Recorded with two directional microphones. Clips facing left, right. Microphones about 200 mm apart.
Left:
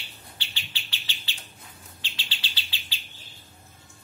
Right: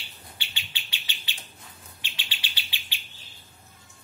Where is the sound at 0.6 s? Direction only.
15° right (ahead or behind).